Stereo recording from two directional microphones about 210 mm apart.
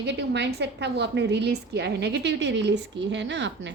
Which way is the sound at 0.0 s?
55° right (ahead or behind).